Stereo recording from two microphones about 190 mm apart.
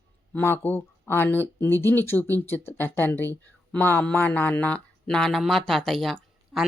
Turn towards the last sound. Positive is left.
turn(degrees=0)  # may be behind; listen again after turning